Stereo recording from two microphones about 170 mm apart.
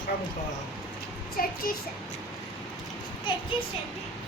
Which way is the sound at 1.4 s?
60° left (ahead or behind).